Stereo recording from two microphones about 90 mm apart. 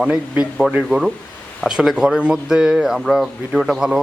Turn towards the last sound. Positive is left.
turn(degrees=-5)  # may be behind; listen again after turning